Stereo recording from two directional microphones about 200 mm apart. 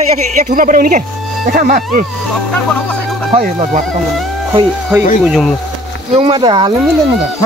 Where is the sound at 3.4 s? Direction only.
35° right (ahead or behind).